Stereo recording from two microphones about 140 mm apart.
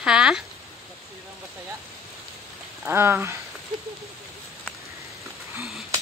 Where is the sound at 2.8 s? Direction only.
15° right (ahead or behind).